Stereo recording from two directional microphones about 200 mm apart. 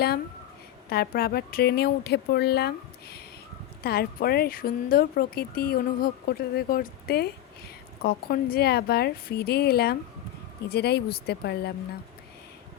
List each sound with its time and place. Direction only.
0.9 s speech: 50° left (ahead or behind)